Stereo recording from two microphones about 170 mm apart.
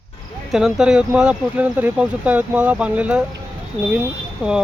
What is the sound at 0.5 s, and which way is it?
Speech, 5° right (ahead or behind).